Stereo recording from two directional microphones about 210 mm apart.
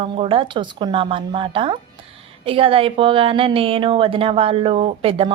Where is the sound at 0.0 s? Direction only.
25° right (ahead or behind).